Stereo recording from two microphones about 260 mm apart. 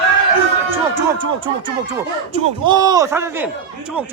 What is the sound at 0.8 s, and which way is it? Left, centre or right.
A man's voice, centre.